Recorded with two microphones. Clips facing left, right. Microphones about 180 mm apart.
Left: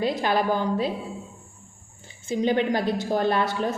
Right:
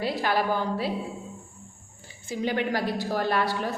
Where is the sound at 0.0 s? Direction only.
20° left (ahead or behind).